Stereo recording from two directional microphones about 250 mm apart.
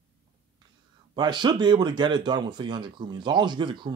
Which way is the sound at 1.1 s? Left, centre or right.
Centre.